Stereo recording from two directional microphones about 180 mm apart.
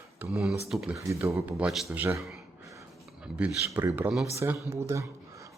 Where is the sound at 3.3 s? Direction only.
10° right (ahead or behind).